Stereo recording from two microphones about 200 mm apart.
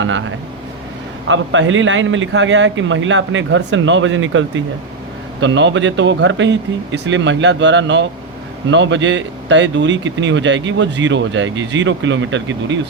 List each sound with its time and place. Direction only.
0.0 s a man's voice: 70° right (ahead or behind)
5.4 s a man's voice: 65° right (ahead or behind)